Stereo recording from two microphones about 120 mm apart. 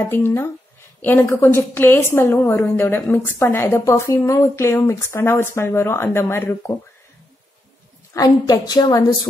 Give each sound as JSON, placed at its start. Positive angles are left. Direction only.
{"t": 0.0, "sound": "a woman's voice", "side_deg": 20}
{"t": 8.1, "sound": "a woman's voice", "side_deg": 30}